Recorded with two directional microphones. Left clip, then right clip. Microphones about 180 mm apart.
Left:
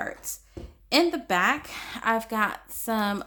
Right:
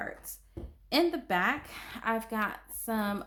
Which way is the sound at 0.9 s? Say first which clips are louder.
Left 5 dB; 15° left (ahead or behind).